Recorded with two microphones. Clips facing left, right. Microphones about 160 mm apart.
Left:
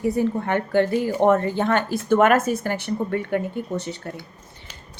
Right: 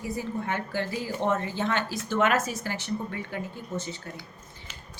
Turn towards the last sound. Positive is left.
turn(degrees=65)  # may be behind; listen again after turning